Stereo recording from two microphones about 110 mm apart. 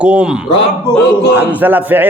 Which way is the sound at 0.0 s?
10° right (ahead or behind).